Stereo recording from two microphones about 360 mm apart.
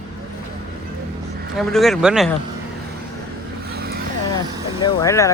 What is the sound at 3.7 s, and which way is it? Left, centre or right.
Vehicle, right.